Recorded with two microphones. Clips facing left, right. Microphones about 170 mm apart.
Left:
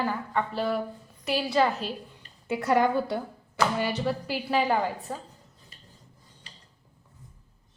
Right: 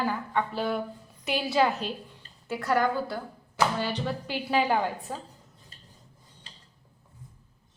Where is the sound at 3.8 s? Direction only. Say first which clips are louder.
Left 3 dB; 10° left (ahead or behind).